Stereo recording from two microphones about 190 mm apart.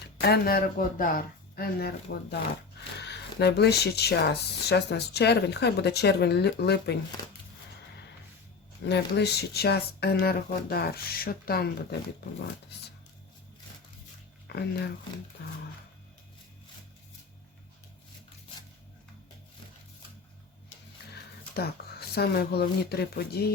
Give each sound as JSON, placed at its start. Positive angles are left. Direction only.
{"t": 0.2, "sound": "speech", "side_deg": 55}
{"t": 8.9, "sound": "speech", "side_deg": 60}
{"t": 14.4, "sound": "speech", "side_deg": 60}
{"t": 21.1, "sound": "music", "side_deg": 60}
{"t": 22.1, "sound": "speech", "side_deg": 55}